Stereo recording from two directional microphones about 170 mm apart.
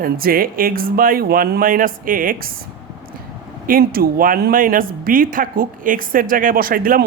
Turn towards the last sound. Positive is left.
turn(degrees=-55)  # may be behind; listen again after turning